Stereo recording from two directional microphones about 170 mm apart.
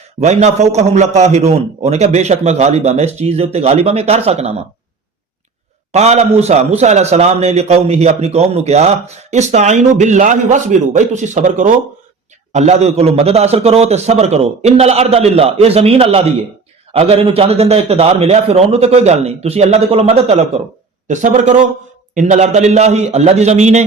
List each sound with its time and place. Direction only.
0.2 s a man's voice: 40° right (ahead or behind)
5.9 s a man's voice: 40° right (ahead or behind)